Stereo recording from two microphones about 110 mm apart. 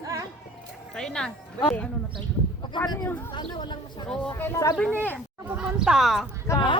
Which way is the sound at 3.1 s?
15° left (ahead or behind).